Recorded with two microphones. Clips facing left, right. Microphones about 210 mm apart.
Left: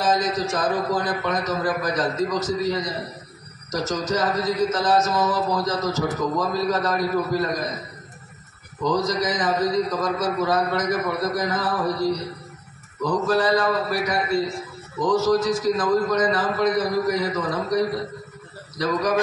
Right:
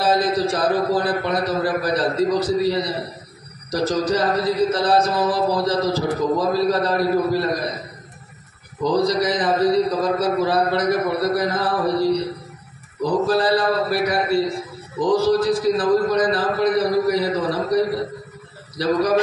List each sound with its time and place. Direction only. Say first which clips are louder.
0.0 s a man's voice: right 3 dB; 35° right (ahead or behind)
8.9 s a man's voice: right 5 dB; 35° right (ahead or behind)
18.8 s a man's voice: right 4 dB; 35° right (ahead or behind)